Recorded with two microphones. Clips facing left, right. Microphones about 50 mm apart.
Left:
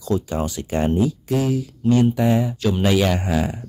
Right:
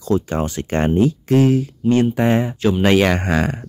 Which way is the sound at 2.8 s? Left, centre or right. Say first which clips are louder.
Right 4 dB; right.